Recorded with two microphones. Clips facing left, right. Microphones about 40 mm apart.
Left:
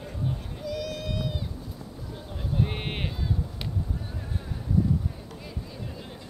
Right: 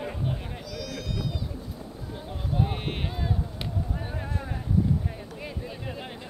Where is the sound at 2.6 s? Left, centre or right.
Centre.